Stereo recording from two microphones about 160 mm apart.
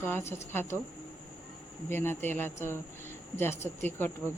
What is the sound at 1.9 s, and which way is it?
Speech, 15° left (ahead or behind).